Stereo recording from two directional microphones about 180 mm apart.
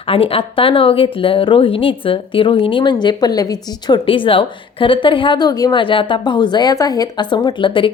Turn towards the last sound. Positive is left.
turn(degrees=30)  # may be behind; listen again after turning